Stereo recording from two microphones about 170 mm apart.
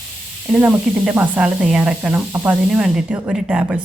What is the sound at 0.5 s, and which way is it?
Speech, 10° right (ahead or behind).